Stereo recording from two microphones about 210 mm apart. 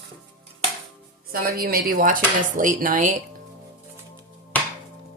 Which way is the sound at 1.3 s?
45° right (ahead or behind).